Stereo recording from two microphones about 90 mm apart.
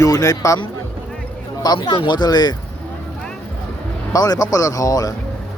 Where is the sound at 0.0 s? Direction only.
40° left (ahead or behind).